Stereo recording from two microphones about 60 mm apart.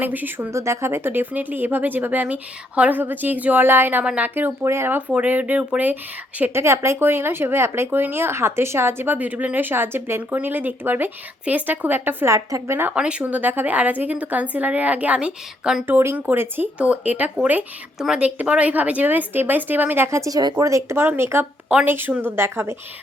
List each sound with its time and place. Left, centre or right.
0.0 s speech: right
0.5 s a woman's voice: right
4.0 s speech: centre
4.6 s a woman's voice: right
6.5 s speech: right
7.9 s speech: right
9.1 s speech: right
12.3 s speech: right
12.9 s a woman's voice: centre
15.9 s speech: right
16.1 s speech: right
16.7 s a woman's voice: right
20.1 s speech: right
21.2 s speech: right